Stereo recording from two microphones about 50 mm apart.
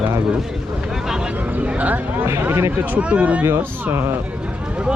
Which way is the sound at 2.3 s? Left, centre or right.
Right.